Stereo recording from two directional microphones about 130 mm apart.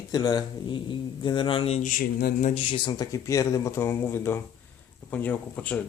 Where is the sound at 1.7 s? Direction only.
85° left.